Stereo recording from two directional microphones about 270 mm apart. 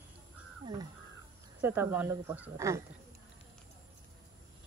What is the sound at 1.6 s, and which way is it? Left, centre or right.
Speech, centre.